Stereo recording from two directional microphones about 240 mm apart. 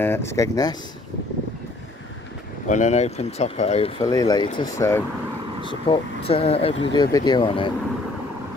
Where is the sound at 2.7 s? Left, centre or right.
Left; by 5.0 s centre.